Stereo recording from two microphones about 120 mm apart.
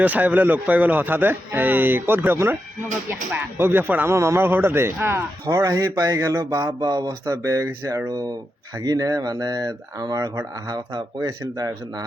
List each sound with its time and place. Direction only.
0.0 s speech: 15° right (ahead or behind)
5.5 s speech: 30° right (ahead or behind)